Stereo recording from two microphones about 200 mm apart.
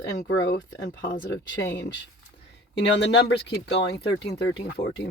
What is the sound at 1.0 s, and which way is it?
Speech, 20° left (ahead or behind).